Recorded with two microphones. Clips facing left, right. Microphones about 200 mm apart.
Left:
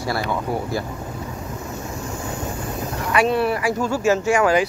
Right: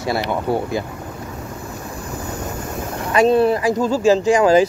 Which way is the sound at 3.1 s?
25° right (ahead or behind).